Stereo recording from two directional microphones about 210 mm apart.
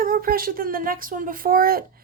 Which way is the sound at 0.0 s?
45° right (ahead or behind).